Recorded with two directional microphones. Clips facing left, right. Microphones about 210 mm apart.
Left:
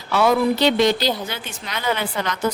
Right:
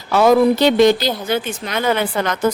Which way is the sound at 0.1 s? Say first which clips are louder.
Right 5 dB; 45° right (ahead or behind).